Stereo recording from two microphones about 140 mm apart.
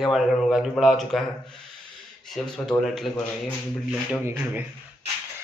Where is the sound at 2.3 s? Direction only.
5° left (ahead or behind).